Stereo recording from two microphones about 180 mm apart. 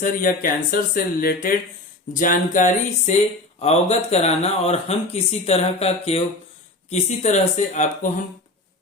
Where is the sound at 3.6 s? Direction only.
35° left (ahead or behind).